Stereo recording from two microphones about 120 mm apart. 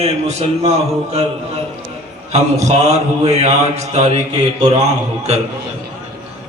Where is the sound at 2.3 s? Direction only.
70° right (ahead or behind).